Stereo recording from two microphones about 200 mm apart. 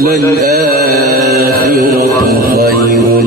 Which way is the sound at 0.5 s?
50° right (ahead or behind).